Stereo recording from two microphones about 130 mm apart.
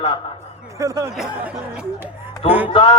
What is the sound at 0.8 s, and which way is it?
Speech, 25° right (ahead or behind).